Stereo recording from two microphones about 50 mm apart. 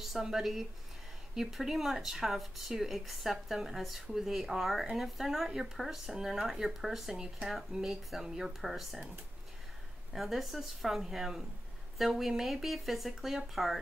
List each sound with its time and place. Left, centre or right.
0.0 s speech: centre
10.1 s speech: centre